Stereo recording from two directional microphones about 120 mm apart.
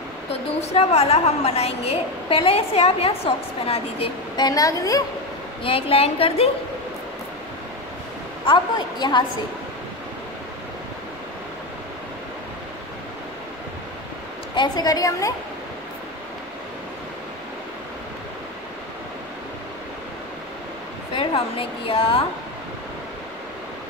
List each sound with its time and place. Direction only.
0.3 s a woman's voice: 60° left (ahead or behind)
4.4 s a woman's voice: 30° left (ahead or behind)
5.6 s a woman's voice: 50° left (ahead or behind)
8.5 s a woman's voice: 40° left (ahead or behind)
14.5 s a woman's voice: 35° left (ahead or behind)
21.1 s a woman's voice: 45° left (ahead or behind)